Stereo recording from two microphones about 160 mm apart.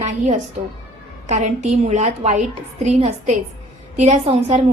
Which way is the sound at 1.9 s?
50° right (ahead or behind).